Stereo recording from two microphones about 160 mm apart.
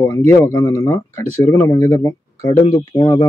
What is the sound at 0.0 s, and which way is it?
Speech, 15° left (ahead or behind).